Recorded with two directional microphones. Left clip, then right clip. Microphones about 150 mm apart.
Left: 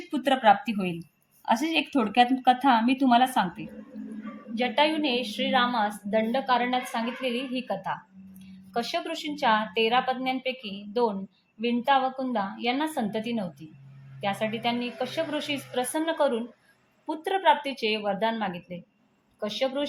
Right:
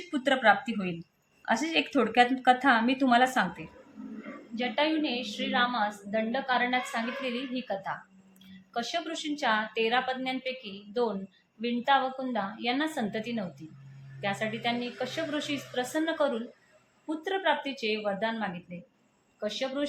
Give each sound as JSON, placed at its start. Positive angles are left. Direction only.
{"t": 0.1, "sound": "a woman's voice", "side_deg": 25}
{"t": 4.5, "sound": "a woman's voice", "side_deg": 45}